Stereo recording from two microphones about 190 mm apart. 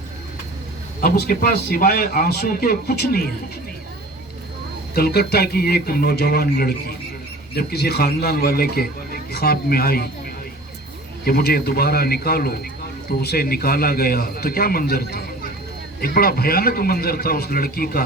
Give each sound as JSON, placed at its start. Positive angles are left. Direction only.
{"t": 1.0, "sound": "speech", "side_deg": 50}
{"t": 4.9, "sound": "a man's voice", "side_deg": 55}
{"t": 11.3, "sound": "a man's voice", "side_deg": 55}